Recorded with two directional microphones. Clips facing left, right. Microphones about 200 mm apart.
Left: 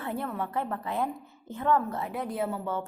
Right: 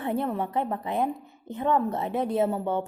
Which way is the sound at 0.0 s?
20° right (ahead or behind).